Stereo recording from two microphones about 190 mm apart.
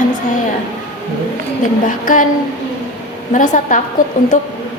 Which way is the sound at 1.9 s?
45° left (ahead or behind).